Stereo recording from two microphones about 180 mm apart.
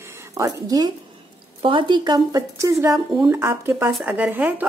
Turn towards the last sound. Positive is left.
turn(degrees=-10)  # may be behind; listen again after turning